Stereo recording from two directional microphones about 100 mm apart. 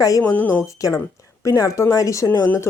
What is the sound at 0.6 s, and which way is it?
Speech, 30° left (ahead or behind).